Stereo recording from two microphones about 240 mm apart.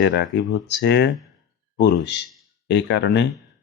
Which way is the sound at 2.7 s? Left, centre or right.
Left.